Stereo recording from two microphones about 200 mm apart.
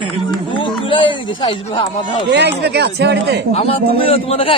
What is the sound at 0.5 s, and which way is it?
Speech, 25° left (ahead or behind).